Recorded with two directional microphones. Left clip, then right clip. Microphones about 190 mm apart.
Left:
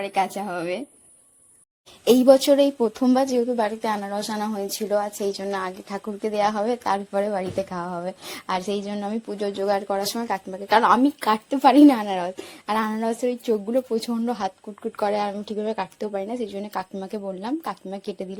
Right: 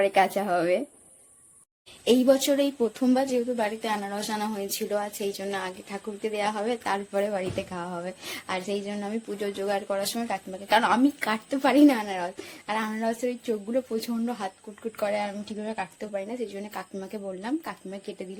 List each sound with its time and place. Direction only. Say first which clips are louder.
0.0 s speech: right 2 dB; 30° left (ahead or behind)
2.0 s a woman's voice: left 6 dB; 30° left (ahead or behind)